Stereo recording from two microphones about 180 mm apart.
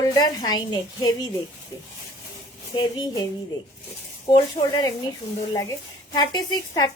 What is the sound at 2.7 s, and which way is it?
Speech, 25° left (ahead or behind).